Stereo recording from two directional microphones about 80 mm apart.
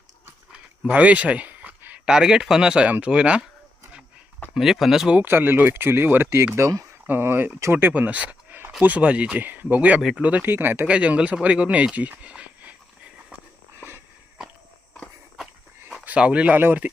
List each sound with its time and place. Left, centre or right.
0.9 s a sound: centre
2.1 s speech: centre
4.5 s speech: centre
5.1 s speech: right
10.8 s speech: centre
13.7 s walk: right
16.0 s speech: centre